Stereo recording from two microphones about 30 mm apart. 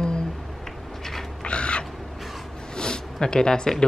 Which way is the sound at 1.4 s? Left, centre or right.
Left.